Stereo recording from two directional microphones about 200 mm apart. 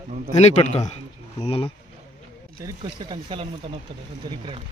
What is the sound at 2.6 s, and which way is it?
Speech, 20° right (ahead or behind).